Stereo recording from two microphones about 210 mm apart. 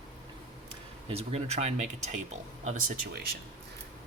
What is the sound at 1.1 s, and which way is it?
Speech, 30° right (ahead or behind).